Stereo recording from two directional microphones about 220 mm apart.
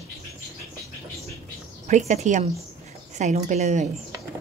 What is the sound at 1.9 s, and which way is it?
A woman's voice, 35° right (ahead or behind).